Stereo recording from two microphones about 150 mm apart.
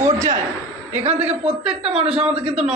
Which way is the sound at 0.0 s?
20° right (ahead or behind).